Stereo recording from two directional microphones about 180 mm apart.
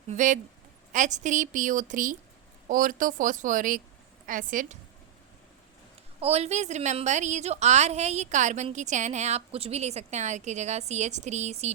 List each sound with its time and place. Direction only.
0.1 s a woman's voice: 45° right (ahead or behind)
6.1 s a woman's voice: 35° right (ahead or behind)